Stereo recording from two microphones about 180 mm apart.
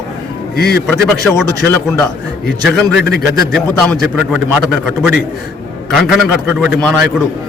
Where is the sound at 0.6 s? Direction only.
60° left (ahead or behind).